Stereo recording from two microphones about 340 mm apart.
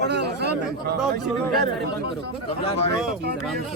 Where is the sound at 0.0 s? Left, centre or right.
Right.